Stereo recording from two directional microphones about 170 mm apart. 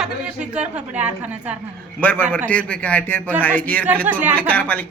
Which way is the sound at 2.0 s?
10° left (ahead or behind).